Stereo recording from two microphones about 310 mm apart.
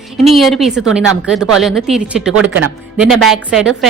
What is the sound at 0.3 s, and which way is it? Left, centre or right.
A woman's voice, centre.